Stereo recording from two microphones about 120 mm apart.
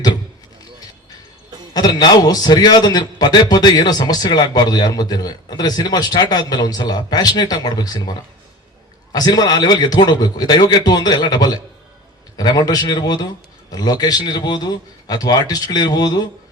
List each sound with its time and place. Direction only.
1.7 s a man's voice: 35° left (ahead or behind)
9.1 s a man's voice: 35° left (ahead or behind)